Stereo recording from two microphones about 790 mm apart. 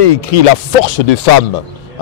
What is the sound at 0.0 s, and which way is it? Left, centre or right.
Speech, left.